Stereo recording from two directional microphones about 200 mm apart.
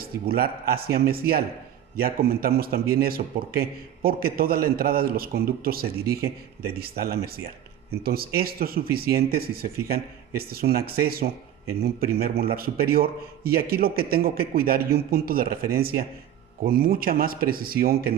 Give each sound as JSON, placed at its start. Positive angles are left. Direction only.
{"t": 0.0, "sound": "a man's voice", "side_deg": -50}